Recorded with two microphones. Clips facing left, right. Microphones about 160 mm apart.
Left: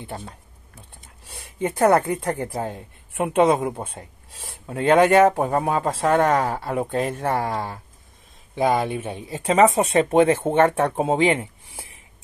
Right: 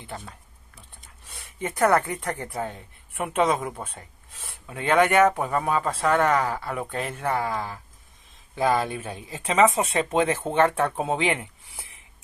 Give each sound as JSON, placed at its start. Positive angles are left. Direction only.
{"t": 1.9, "sound": "speech", "side_deg": 30}
{"t": 4.6, "sound": "speech", "side_deg": 35}
{"t": 8.5, "sound": "speech", "side_deg": 25}